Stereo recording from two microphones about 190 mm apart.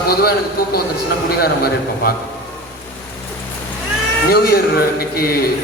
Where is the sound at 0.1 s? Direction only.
50° left (ahead or behind).